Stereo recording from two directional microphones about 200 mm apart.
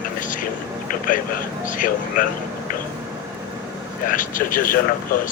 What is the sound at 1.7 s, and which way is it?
Speech, 45° left (ahead or behind).